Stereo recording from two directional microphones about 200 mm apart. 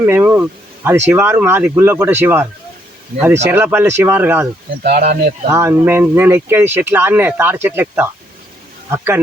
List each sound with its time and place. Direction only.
0.0 s speech: 10° right (ahead or behind)
3.5 s speech: 10° right (ahead or behind)
4.8 s speech: 45° right (ahead or behind)
5.5 s speech: 10° right (ahead or behind)